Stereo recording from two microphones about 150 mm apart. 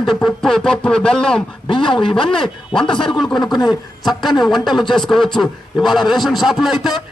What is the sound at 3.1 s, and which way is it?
A man's voice, centre (ahead or behind).